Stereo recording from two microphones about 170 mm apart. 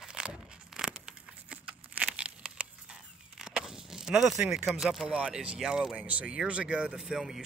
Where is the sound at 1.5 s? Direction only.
5° right (ahead or behind).